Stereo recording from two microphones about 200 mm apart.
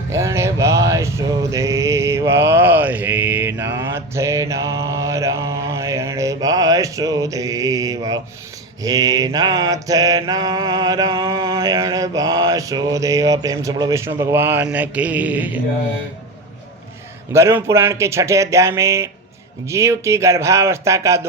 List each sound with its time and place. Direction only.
0.1 s music: 15° right (ahead or behind)
8.8 s mantra: 15° right (ahead or behind)
17.3 s mantra: 15° right (ahead or behind)